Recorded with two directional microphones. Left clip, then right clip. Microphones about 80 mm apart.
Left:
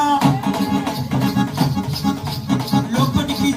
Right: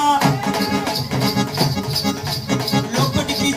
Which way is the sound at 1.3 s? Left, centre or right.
Left.